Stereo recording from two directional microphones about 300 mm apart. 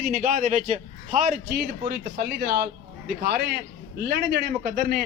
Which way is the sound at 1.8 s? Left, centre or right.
Right.